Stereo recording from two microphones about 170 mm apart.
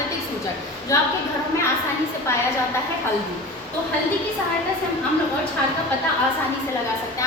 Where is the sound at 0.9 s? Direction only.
20° left (ahead or behind).